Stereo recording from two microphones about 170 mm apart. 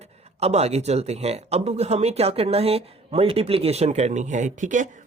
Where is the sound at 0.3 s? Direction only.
40° right (ahead or behind).